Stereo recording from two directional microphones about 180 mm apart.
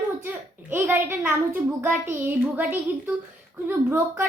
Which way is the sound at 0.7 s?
10° right (ahead or behind).